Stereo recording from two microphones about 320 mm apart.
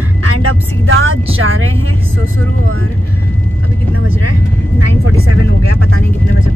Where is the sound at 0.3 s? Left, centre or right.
Right.